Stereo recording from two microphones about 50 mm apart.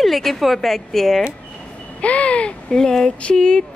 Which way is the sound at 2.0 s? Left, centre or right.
Left.